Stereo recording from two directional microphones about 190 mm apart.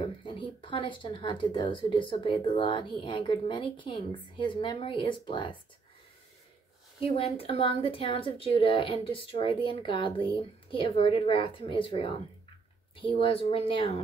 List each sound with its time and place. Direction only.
0.0 s speech: 25° left (ahead or behind)
7.0 s speech: 30° left (ahead or behind)